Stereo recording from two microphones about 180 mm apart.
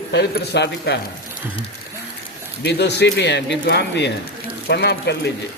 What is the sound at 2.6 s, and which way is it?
Speech, 70° left (ahead or behind).